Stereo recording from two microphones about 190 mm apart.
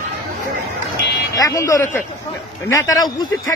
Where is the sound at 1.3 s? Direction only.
20° left (ahead or behind).